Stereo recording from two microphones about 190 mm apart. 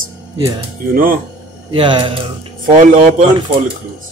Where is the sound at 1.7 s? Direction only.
25° right (ahead or behind).